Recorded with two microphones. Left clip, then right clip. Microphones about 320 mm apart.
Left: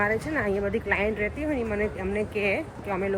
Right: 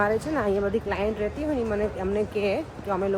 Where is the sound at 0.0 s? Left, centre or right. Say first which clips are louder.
Right 2 dB; centre.